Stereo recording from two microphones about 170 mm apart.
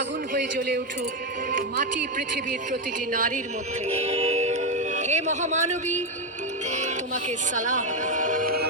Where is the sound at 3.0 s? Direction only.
50° right (ahead or behind).